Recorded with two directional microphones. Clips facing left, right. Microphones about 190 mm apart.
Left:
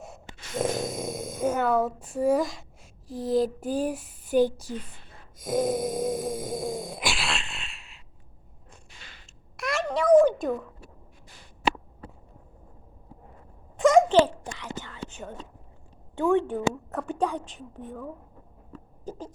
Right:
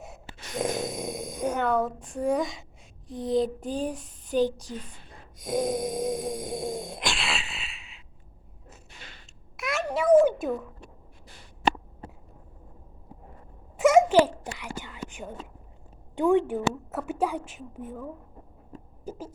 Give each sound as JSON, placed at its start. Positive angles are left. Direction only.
{"t": 0.0, "sound": "speech", "side_deg": 0}
{"t": 5.4, "sound": "a sound", "side_deg": 0}
{"t": 9.6, "sound": "a sound", "side_deg": 0}
{"t": 13.7, "sound": "babbling", "side_deg": -10}
{"t": 14.8, "sound": "whispering", "side_deg": -15}
{"t": 16.1, "sound": "a woman's voice", "side_deg": -15}
{"t": 19.0, "sound": "rodents", "side_deg": -5}